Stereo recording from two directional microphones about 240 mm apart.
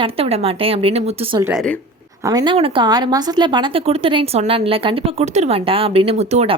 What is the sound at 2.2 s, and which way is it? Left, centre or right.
Speech, centre.